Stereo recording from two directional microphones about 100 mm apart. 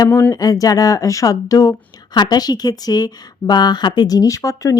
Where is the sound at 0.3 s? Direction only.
40° left (ahead or behind).